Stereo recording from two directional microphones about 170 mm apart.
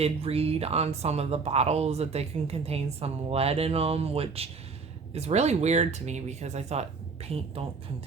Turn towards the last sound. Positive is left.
turn(degrees=-35)  # may be behind; listen again after turning